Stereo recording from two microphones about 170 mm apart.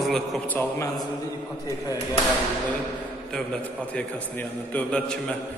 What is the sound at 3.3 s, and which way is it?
A man's voice, 5° left (ahead or behind).